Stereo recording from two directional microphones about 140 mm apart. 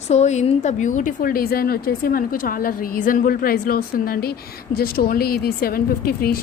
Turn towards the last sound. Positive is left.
turn(degrees=90)